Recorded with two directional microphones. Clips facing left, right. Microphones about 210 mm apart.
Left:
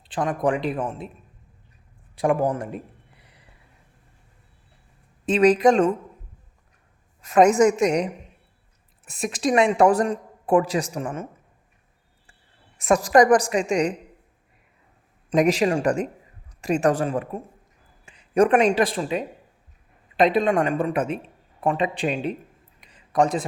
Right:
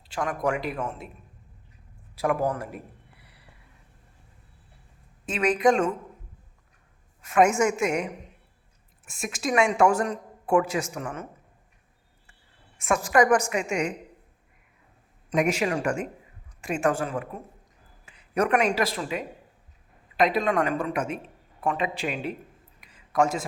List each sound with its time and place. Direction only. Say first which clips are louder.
0.1 s a woman's voice: left 4 dB; 30° left (ahead or behind)
2.2 s a man's voice: left 4 dB; 30° left (ahead or behind)
5.4 s a woman's voice: left 5 dB; 40° left (ahead or behind)
7.2 s a woman's voice: left 5 dB; 35° left (ahead or behind)
12.7 s a woman's voice: left 5 dB; 35° left (ahead or behind)
15.3 s a woman's voice: left 5 dB; 35° left (ahead or behind)
23.0 s a sound: left 3 dB; 35° left (ahead or behind)